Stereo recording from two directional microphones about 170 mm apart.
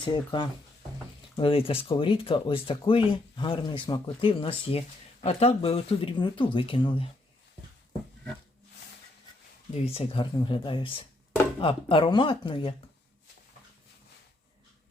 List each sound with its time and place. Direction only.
0.0 s speech: 25° left (ahead or behind)
9.8 s speech: 35° left (ahead or behind)